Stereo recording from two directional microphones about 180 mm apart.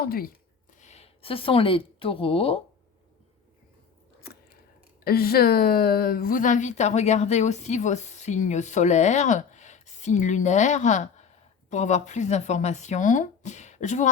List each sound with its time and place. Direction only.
0.0 s speech: 55° left (ahead or behind)
0.8 s a woman's voice: 35° left (ahead or behind)
5.0 s a woman's voice: 55° left (ahead or behind); by 14.1 s 40° left (ahead or behind)